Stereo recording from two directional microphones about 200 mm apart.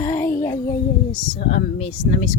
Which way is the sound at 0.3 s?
45° left (ahead or behind).